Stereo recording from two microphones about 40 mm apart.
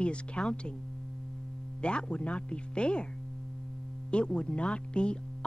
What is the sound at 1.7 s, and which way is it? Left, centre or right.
Speech, left.